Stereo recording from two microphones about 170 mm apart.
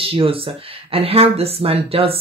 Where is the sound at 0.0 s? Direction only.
35° right (ahead or behind).